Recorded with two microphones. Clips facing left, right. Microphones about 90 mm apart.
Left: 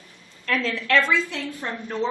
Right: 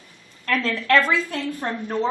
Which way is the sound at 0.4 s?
50° right (ahead or behind).